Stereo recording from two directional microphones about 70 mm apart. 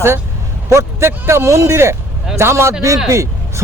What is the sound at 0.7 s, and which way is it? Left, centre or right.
A man's voice, right.